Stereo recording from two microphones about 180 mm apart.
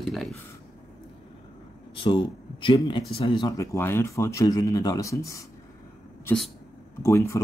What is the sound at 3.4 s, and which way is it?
Speech, 20° left (ahead or behind).